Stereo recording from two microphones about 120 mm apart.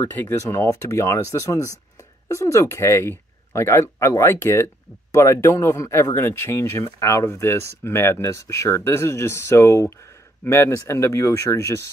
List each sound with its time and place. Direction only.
0.0 s speech: 15° left (ahead or behind)